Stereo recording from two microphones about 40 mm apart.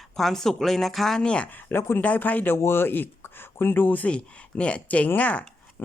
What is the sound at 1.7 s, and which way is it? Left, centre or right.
Speech, left.